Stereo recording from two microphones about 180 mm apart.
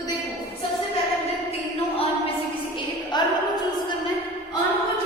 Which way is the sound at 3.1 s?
25° left (ahead or behind).